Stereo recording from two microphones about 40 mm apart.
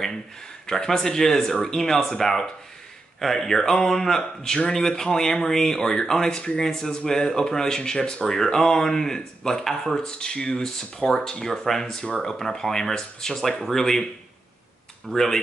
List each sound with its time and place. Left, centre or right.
0.7 s speech: centre
4.2 s speech: left
15.0 s speech: centre